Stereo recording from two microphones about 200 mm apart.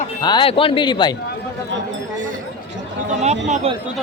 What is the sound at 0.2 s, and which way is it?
Speech, 20° left (ahead or behind).